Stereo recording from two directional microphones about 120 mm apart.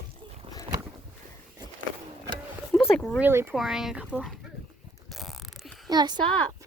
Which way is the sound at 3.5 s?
Centre (ahead or behind).